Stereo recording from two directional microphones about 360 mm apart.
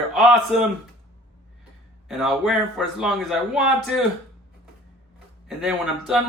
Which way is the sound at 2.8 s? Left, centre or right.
Centre.